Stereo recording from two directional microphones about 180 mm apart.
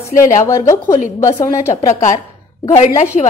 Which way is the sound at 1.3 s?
40° left (ahead or behind).